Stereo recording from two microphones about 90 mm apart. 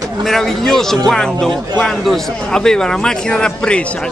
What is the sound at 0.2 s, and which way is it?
A man's voice, centre (ahead or behind).